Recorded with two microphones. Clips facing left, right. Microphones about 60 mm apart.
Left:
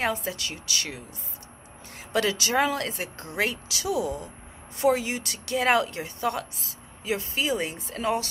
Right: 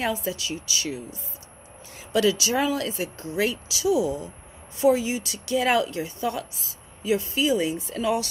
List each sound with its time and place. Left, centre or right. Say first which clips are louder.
0.0 s speech: right 1 dB; left
2.1 s speech: right 2 dB; left